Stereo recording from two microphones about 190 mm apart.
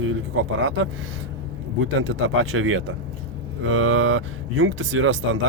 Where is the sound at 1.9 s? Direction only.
85° right.